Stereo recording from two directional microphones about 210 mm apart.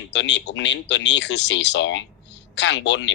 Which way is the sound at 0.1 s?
60° left (ahead or behind).